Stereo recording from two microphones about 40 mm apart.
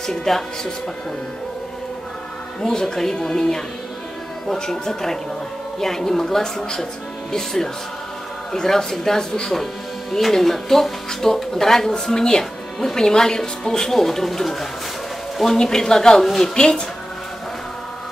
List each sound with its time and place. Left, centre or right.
0.0 s speech: centre
2.6 s speech: centre
15.5 s speech: centre
16.5 s speech: left